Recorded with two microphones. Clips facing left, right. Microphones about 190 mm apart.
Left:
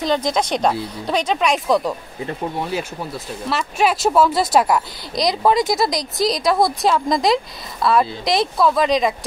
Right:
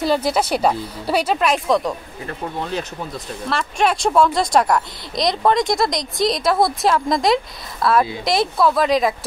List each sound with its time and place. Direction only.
0.0 s speech: 5° right (ahead or behind)
2.2 s speech: 10° left (ahead or behind)